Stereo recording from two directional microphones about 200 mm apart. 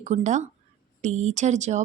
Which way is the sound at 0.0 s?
35° right (ahead or behind).